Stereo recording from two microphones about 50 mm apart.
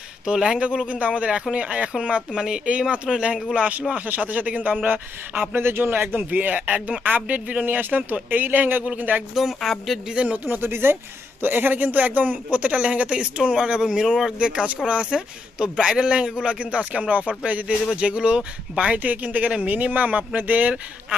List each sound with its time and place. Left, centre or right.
0.3 s speech: centre
3.5 s speech: right
5.5 s speech: right
6.1 s speech: right
9.3 s speech: centre
10.1 s speech: right
10.3 s speech: right
10.7 s speech: right